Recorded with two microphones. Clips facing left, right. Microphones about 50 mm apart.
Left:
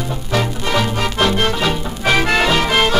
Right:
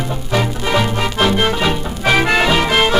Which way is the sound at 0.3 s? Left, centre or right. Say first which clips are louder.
Right 1 dB; centre.